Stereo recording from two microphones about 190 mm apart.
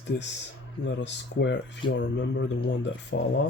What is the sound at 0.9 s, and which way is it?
Speech, 65° left (ahead or behind).